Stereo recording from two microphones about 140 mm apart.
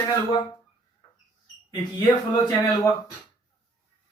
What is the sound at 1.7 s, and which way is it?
Speech, 30° left (ahead or behind).